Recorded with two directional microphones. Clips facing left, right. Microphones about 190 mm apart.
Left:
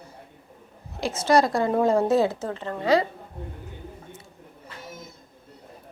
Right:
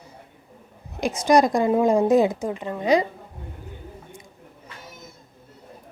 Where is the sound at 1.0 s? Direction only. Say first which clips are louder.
Right 3 dB; 15° right (ahead or behind).